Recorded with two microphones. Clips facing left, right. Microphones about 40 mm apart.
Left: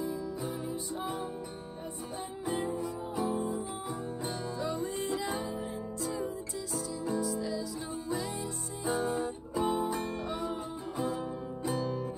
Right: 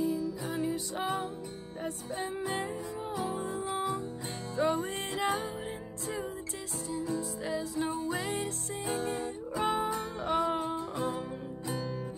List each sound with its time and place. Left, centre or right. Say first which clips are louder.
0.6 s music: right 4 dB; right
2.4 s music: left 1 dB; right
4.6 s music: right 7 dB; right
7.2 s music: left 1 dB; right
9.6 s music: even; right
11.6 s music: left 4 dB; centre